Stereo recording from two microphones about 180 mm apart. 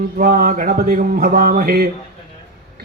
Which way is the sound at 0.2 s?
50° right (ahead or behind).